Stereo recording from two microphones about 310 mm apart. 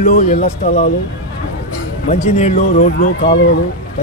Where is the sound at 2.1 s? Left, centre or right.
Left.